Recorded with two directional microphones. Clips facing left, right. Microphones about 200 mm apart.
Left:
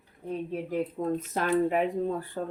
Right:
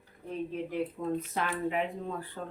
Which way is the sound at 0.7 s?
40° left (ahead or behind).